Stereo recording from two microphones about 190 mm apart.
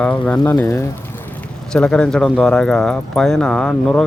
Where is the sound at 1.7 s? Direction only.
5° left (ahead or behind).